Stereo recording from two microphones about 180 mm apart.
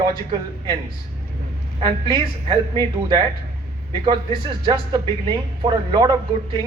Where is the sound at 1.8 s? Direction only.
25° right (ahead or behind).